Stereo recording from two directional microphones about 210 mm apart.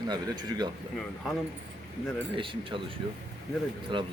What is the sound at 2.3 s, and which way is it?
Speech, 25° right (ahead or behind).